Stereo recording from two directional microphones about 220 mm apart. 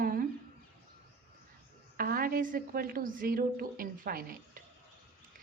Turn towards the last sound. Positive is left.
turn(degrees=-40)  # may be behind; listen again after turning